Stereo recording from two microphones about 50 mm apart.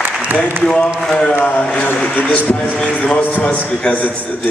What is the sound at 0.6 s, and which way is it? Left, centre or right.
Speech, centre.